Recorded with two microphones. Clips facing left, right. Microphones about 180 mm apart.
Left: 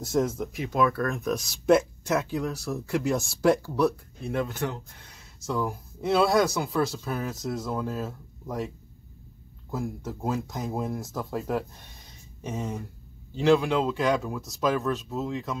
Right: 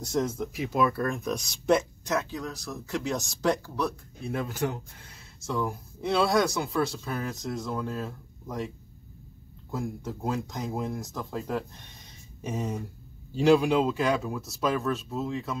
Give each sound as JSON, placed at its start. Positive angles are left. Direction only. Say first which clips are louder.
{"t": 0.1, "sound": "speech", "louder": "left 2 dB", "side_deg": 5}
{"t": 4.2, "sound": "speech", "louder": "left 1 dB", "side_deg": 0}
{"t": 5.5, "sound": "speech", "louder": "left 1 dB", "side_deg": 0}